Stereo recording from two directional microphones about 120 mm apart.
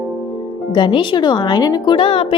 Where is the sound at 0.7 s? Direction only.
40° left (ahead or behind).